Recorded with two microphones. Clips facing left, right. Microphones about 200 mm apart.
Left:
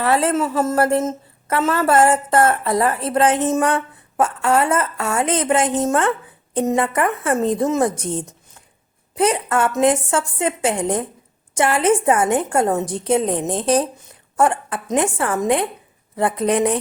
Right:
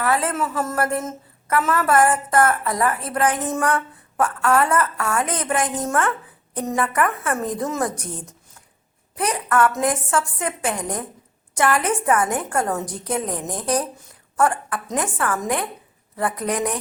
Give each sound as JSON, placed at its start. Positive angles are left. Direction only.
{"t": 0.0, "sound": "a woman's voice", "side_deg": 25}